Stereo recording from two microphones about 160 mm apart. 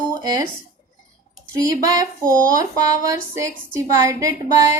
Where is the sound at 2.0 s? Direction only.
20° right (ahead or behind).